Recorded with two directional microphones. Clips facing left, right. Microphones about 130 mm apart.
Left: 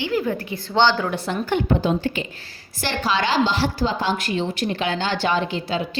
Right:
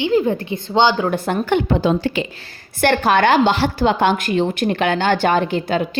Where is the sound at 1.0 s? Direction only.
50° right (ahead or behind).